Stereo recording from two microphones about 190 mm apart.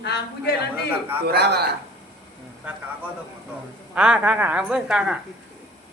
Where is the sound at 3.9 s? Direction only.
5° right (ahead or behind).